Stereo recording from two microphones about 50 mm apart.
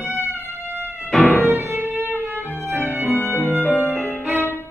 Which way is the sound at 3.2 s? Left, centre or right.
Left.